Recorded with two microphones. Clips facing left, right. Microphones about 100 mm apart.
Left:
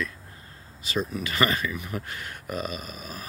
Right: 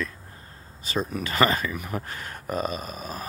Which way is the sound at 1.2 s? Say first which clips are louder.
Right 5 dB; 35° right (ahead or behind).